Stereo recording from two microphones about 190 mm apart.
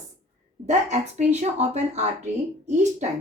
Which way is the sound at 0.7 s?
35° right (ahead or behind).